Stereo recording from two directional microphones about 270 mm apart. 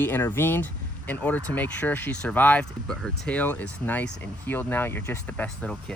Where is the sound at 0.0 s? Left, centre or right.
Centre.